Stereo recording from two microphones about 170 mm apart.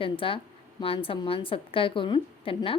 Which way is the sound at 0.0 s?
30° left (ahead or behind).